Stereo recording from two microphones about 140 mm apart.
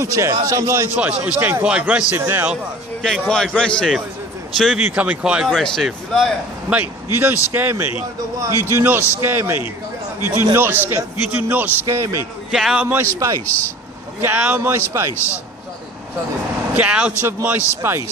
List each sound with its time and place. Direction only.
0.0 s a man's voice: 20° right (ahead or behind)
3.0 s a man's voice: 5° left (ahead or behind)
6.7 s a man's voice: 15° right (ahead or behind)
12.4 s a man's voice: 5° right (ahead or behind)
13.1 s a man's voice: 25° right (ahead or behind)
14.2 s a man's voice: 10° right (ahead or behind)
16.7 s a man's voice: 10° right (ahead or behind)